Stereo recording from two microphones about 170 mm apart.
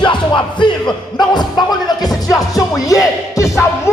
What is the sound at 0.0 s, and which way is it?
Music, 30° left (ahead or behind).